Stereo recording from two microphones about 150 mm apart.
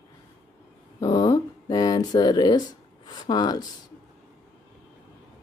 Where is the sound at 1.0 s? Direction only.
25° left (ahead or behind).